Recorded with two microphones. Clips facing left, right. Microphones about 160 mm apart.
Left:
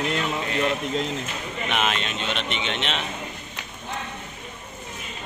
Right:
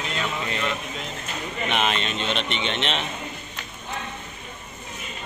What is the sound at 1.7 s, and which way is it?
Speech, centre (ahead or behind).